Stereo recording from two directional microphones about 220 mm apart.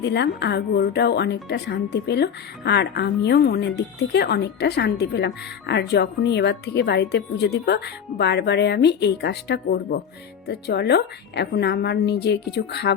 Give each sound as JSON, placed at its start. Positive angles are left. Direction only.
{"t": 0.0, "sound": "a woman's voice", "side_deg": 50}